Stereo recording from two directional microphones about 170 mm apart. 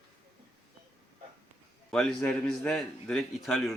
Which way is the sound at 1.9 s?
5° left (ahead or behind).